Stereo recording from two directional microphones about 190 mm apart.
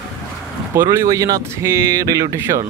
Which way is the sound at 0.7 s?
15° right (ahead or behind).